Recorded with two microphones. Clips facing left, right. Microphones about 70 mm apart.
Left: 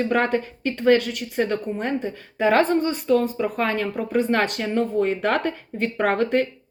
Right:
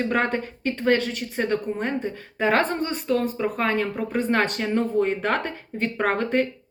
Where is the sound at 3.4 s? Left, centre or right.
Right.